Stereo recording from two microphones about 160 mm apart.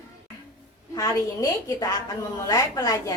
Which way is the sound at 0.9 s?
20° left (ahead or behind).